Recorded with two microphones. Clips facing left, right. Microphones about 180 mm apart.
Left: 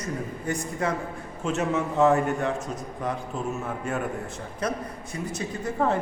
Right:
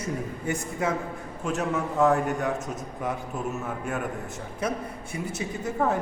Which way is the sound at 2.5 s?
20° right (ahead or behind).